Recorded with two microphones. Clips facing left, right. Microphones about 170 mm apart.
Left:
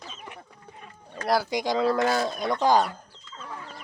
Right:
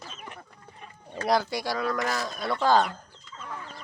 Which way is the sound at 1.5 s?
20° left (ahead or behind).